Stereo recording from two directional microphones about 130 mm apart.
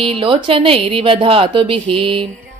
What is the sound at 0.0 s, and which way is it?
A woman's voice, 45° right (ahead or behind).